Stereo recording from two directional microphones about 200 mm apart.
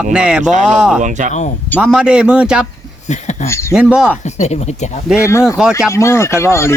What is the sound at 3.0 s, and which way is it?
Speech, 35° left (ahead or behind).